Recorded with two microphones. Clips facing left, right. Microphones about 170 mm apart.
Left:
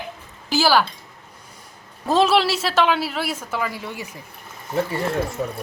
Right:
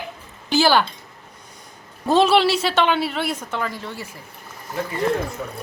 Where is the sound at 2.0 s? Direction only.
Centre (ahead or behind).